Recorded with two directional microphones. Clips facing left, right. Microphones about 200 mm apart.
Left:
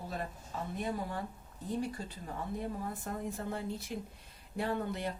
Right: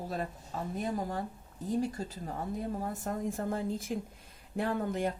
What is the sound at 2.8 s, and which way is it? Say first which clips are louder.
A woman's voice: right 4 dB; 45° right (ahead or behind).